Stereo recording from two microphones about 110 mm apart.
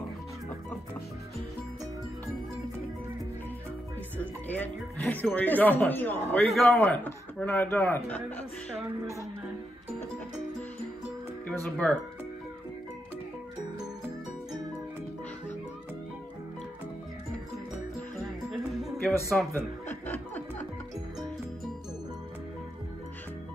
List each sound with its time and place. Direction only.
4.2 s speech: 15° left (ahead or behind)
11.8 s speech: 10° left (ahead or behind)
18.5 s music: centre (ahead or behind)
19.5 s music: 20° left (ahead or behind)